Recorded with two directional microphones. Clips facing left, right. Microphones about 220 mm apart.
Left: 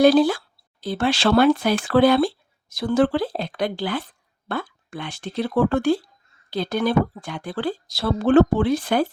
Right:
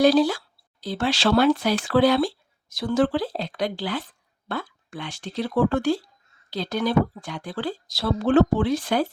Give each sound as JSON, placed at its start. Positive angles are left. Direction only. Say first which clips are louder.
{"t": 0.0, "sound": "speech", "louder": "left 3 dB", "side_deg": 55}